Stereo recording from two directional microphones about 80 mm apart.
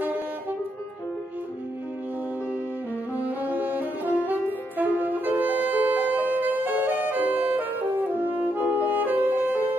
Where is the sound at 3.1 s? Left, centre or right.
Right.